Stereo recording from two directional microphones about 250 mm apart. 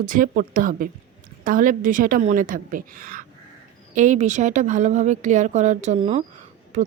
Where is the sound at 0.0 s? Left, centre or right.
Right.